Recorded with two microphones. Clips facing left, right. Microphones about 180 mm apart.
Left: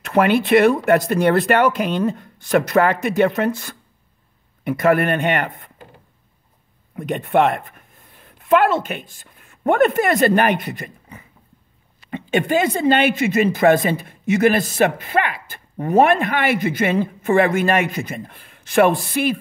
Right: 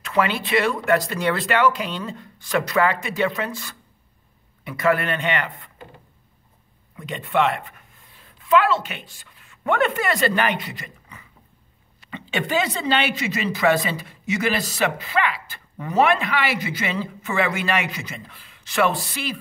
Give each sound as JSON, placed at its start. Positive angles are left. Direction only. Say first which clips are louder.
{"t": 0.0, "sound": "a woman's voice", "louder": "left 6 dB", "side_deg": 50}
{"t": 7.0, "sound": "a woman's voice", "louder": "left 5 dB", "side_deg": 55}